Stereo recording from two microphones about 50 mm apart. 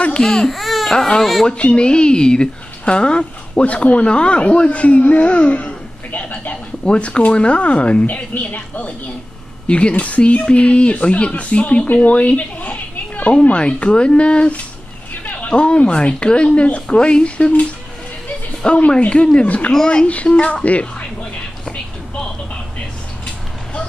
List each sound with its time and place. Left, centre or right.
0.2 s speech: centre
0.5 s baby cry: centre
0.9 s speech: centre
1.6 s speech: left
18.9 s speech: left
19.4 s speech: left
19.7 s speech: centre
20.1 s speech: left